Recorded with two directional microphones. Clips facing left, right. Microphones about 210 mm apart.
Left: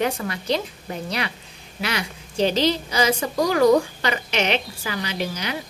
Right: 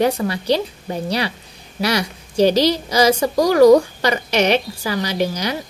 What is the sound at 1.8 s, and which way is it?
A woman's voice, 40° right (ahead or behind).